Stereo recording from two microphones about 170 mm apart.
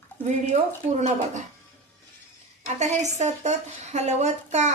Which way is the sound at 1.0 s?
45° right (ahead or behind).